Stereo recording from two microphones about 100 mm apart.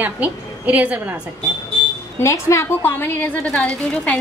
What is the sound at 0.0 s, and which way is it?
A woman's voice, 15° right (ahead or behind).